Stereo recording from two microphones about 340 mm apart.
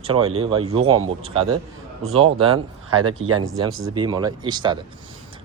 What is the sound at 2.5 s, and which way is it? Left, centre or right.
Speech, right.